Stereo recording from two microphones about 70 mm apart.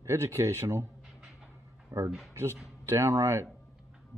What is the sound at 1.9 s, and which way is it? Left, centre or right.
Speech, right.